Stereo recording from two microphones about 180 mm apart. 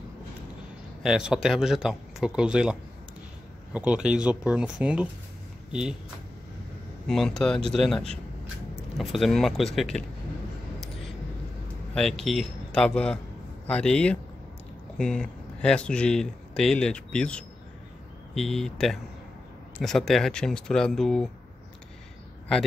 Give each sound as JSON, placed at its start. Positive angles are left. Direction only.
{"t": 1.0, "sound": "speech", "side_deg": -5}
{"t": 7.1, "sound": "speech", "side_deg": 5}
{"t": 11.9, "sound": "speech", "side_deg": 5}